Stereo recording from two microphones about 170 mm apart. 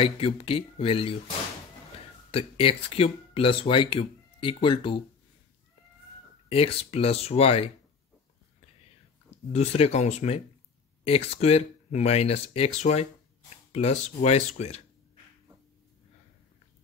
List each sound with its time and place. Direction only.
0.0 s speech: 35° left (ahead or behind)
6.5 s speech: 35° left (ahead or behind)
9.5 s speech: 40° left (ahead or behind)